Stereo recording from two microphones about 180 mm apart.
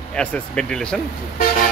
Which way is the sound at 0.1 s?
5° left (ahead or behind).